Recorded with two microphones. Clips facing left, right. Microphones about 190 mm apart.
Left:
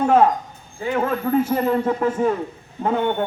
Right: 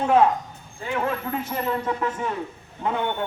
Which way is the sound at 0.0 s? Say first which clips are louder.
Left 3 dB; 45° left (ahead or behind).